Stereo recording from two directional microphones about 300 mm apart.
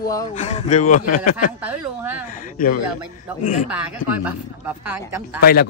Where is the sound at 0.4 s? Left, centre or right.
Left.